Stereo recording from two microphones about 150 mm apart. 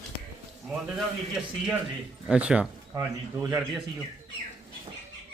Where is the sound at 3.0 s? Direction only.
20° right (ahead or behind).